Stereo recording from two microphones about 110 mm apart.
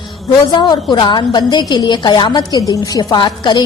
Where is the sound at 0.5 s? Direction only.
40° left (ahead or behind).